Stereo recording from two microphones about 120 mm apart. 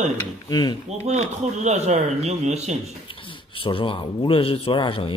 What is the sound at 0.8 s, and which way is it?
Speech, 65° right (ahead or behind).